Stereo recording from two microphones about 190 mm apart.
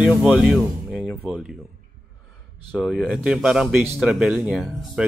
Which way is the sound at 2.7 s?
Centre (ahead or behind).